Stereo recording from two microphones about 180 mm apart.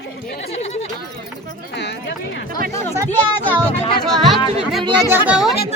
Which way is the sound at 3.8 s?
30° left (ahead or behind).